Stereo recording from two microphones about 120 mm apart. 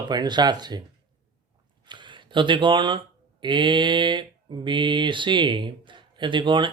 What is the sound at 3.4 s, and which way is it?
Mantra, 40° right (ahead or behind).